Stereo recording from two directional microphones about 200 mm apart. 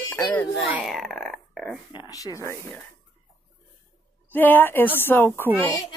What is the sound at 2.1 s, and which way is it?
Speech, 15° left (ahead or behind).